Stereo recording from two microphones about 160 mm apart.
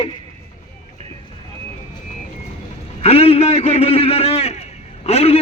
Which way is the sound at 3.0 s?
40° left (ahead or behind).